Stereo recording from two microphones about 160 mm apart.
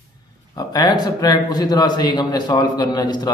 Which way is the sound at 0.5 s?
25° left (ahead or behind).